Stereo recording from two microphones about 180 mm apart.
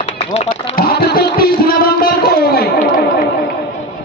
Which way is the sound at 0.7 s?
60° left (ahead or behind).